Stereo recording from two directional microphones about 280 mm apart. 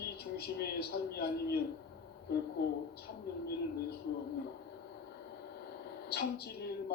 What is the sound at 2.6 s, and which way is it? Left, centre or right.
Speech, left.